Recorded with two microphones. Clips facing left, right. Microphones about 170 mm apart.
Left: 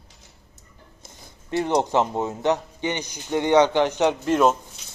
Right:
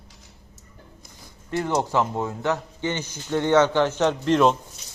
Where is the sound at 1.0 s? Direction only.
20° left (ahead or behind).